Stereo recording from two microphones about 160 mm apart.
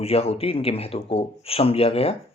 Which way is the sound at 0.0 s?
40° left (ahead or behind).